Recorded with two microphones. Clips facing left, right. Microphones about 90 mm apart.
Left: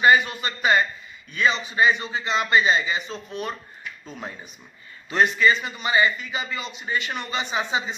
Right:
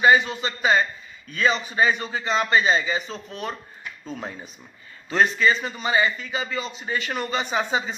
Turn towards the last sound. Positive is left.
turn(degrees=-40)  # may be behind; listen again after turning